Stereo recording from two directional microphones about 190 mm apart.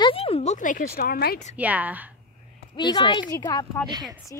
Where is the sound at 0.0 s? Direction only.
30° left (ahead or behind); by 1.4 s 55° left (ahead or behind).